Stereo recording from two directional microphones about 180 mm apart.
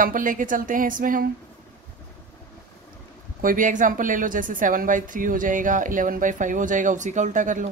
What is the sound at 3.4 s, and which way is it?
A woman's voice, 50° right (ahead or behind).